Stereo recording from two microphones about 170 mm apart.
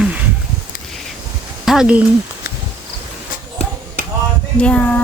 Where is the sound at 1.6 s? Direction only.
5° right (ahead or behind).